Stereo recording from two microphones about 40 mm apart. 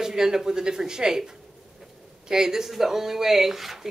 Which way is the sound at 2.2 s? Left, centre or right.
Centre.